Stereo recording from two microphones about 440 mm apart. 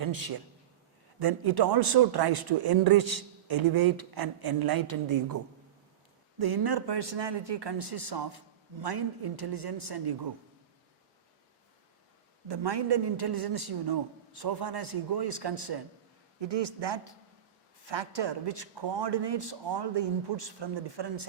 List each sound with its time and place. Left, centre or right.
0.0 s a woman's voice: right
6.4 s speech: right
12.5 s speech: right
16.4 s speech: right